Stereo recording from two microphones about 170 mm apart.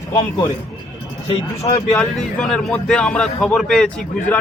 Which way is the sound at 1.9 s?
5° left (ahead or behind).